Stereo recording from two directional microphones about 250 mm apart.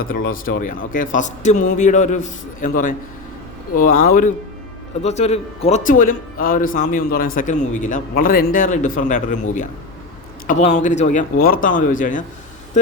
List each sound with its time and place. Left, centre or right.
0.3 s a man's voice: left